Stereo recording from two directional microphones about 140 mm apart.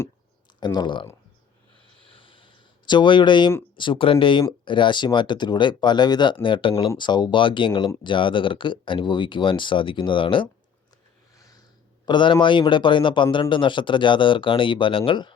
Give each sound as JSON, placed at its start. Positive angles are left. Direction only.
{"t": 0.6, "sound": "speech", "side_deg": 30}
{"t": 2.1, "sound": "a sound", "side_deg": 40}
{"t": 3.8, "sound": "speech", "side_deg": 35}
{"t": 11.3, "sound": "snort", "side_deg": 25}
{"t": 12.0, "sound": "speech", "side_deg": 35}